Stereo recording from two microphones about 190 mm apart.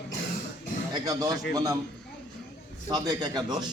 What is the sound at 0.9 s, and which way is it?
Speech, 20° right (ahead or behind).